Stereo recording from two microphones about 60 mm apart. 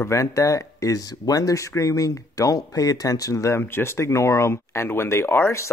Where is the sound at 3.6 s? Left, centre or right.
Left.